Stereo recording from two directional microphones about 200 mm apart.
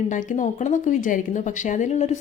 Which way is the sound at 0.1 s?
40° left (ahead or behind).